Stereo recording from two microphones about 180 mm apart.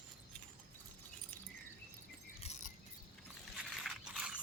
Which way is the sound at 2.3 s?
35° left (ahead or behind).